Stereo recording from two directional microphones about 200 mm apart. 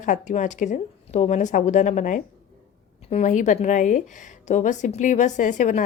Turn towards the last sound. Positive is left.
turn(degrees=40)  # may be behind; listen again after turning